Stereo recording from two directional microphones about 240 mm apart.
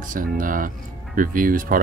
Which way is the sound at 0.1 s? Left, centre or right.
Right.